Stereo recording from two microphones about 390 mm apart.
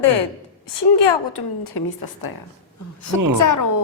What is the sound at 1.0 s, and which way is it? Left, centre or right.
A woman's voice, left.